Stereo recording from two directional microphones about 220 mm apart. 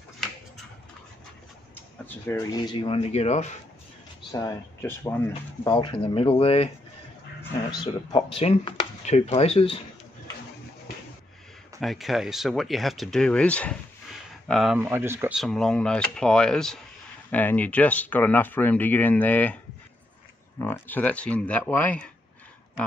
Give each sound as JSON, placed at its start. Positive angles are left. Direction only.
{"t": 2.0, "sound": "speech", "side_deg": 10}
{"t": 4.3, "sound": "speech", "side_deg": 15}
{"t": 5.7, "sound": "speech", "side_deg": 25}
{"t": 7.8, "sound": "speech", "side_deg": 25}
{"t": 11.8, "sound": "speech", "side_deg": 0}
{"t": 14.8, "sound": "speech", "side_deg": -10}
{"t": 20.6, "sound": "speech", "side_deg": 10}